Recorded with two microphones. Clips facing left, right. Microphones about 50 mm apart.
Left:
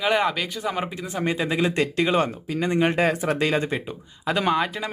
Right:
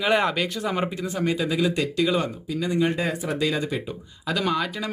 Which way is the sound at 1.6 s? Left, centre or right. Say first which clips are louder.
Left 2 dB; left.